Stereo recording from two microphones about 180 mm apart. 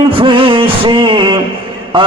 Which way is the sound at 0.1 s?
30° right (ahead or behind).